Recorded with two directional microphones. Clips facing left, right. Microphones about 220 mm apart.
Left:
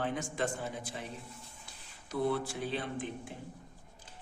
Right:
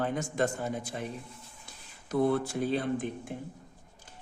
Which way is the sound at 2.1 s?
50° right (ahead or behind).